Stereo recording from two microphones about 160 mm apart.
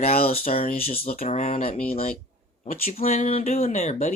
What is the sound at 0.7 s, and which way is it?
Speech, 40° left (ahead or behind).